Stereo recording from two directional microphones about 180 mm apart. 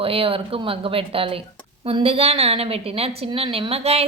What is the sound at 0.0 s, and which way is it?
Speech, 30° right (ahead or behind).